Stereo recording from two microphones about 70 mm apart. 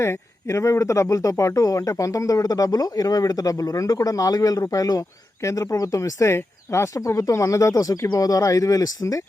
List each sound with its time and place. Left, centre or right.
0.0 s speech: left